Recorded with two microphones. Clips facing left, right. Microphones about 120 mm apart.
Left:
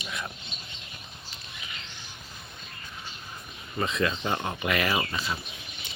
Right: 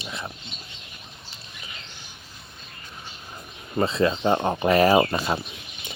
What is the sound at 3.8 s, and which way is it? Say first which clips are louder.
Speech: right 6 dB; 30° right (ahead or behind).